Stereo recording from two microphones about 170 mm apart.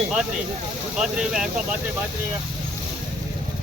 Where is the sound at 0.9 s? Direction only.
5° right (ahead or behind).